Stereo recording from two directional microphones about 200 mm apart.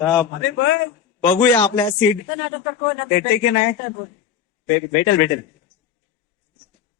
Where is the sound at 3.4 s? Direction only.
45° left (ahead or behind).